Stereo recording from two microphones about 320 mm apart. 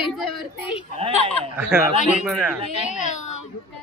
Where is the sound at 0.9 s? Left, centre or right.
Centre.